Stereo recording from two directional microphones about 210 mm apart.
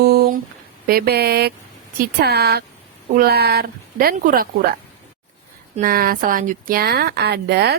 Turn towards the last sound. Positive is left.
turn(degrees=-50)  # may be behind; listen again after turning